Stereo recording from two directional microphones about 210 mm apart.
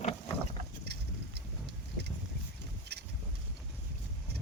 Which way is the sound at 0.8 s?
50° right (ahead or behind).